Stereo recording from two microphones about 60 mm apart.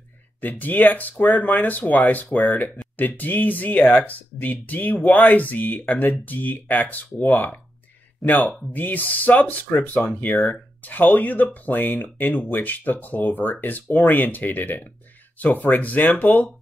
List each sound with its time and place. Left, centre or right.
0.4 s speech: left